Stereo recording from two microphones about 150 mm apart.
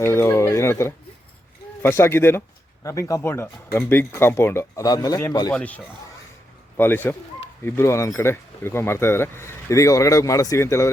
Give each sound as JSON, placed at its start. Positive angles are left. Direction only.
{"t": 0.0, "sound": "speech", "side_deg": 15}
{"t": 5.5, "sound": "speech", "side_deg": 10}